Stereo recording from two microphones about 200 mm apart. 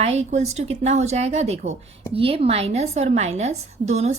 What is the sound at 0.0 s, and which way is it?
A woman's voice, 35° right (ahead or behind).